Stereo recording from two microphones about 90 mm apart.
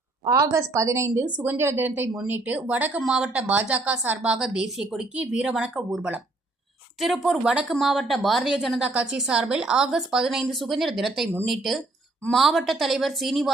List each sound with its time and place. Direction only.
0.3 s a woman's voice: 40° right (ahead or behind); by 4.2 s 20° right (ahead or behind)
4.2 s a woman's voice: 10° right (ahead or behind)